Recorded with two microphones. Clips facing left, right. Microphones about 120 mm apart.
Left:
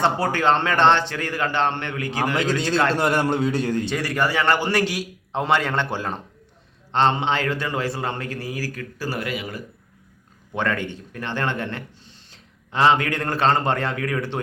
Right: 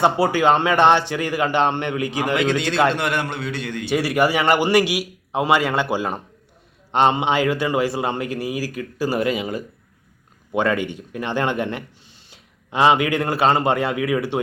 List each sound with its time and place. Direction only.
0.0 s speech: 10° right (ahead or behind)
2.3 s a man's voice: 40° left (ahead or behind)
3.8 s speech: 10° right (ahead or behind)